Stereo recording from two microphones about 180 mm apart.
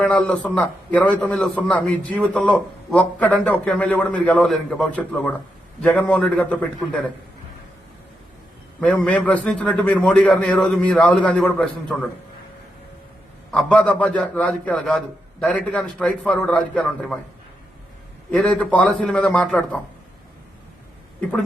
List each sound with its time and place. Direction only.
0.0 s a man's voice: 5° left (ahead or behind)
8.8 s a man's voice: 5° left (ahead or behind)
13.5 s a man's voice: 5° left (ahead or behind)
18.3 s a man's voice: 5° left (ahead or behind)